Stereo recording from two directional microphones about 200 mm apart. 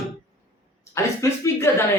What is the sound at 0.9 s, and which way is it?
Speech, 15° left (ahead or behind).